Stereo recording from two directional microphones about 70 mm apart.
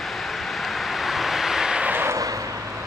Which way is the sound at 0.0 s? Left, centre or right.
Centre.